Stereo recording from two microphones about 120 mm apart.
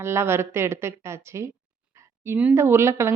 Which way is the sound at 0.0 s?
20° right (ahead or behind).